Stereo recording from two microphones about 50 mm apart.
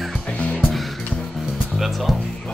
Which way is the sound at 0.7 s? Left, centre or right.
Centre.